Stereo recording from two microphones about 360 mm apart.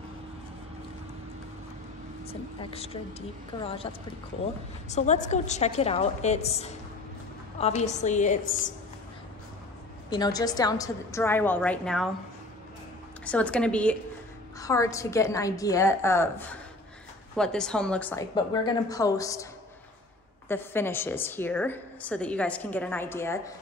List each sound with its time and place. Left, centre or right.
2.2 s a woman's voice: centre
10.0 s a woman's voice: centre
13.2 s a woman's voice: centre
20.4 s a woman's voice: centre